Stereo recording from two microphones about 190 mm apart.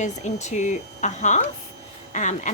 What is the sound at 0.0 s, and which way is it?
A woman's voice, 35° left (ahead or behind).